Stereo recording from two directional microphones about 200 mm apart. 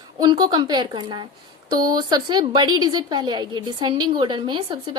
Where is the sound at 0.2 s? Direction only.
20° right (ahead or behind).